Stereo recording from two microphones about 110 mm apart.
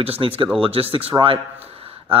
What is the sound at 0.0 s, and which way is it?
Speech, 60° right (ahead or behind).